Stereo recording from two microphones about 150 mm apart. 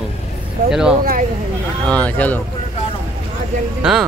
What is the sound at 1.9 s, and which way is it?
Speech, 10° left (ahead or behind).